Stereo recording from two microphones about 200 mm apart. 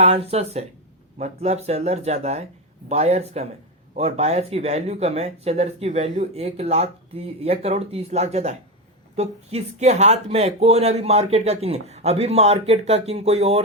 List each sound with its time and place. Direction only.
0.0 s speech: 30° right (ahead or behind)